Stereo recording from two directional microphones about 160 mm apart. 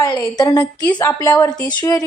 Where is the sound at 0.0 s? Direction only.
20° left (ahead or behind).